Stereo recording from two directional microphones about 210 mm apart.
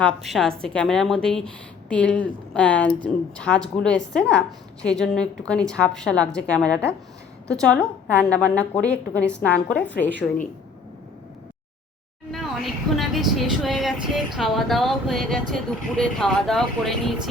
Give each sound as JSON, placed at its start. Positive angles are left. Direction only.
{"t": 0.3, "sound": "a woman's voice", "side_deg": 0}
{"t": 12.3, "sound": "a woman's voice", "side_deg": 0}